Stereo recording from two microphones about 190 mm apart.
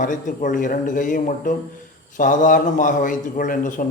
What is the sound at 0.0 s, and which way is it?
A man's voice, 45° left (ahead or behind).